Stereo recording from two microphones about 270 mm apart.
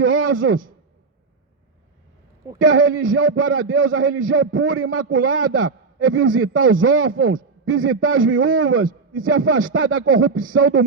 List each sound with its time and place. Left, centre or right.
0.0 s a man's voice: right
2.6 s a man's voice: right